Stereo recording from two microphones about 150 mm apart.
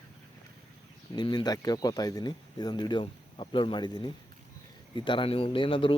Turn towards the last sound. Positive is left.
turn(degrees=35)  # may be behind; listen again after turning